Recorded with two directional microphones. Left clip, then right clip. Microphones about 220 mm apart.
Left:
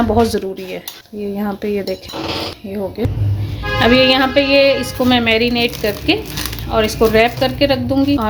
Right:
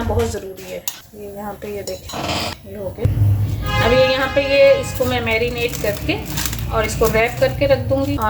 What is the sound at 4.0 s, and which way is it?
Speech, 45° left (ahead or behind).